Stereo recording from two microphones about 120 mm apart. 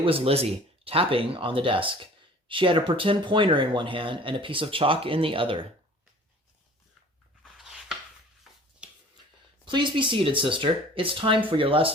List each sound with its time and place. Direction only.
0.0 s speech: 55° right (ahead or behind)
7.4 s a sound: 5° right (ahead or behind)
9.6 s speech: 40° right (ahead or behind)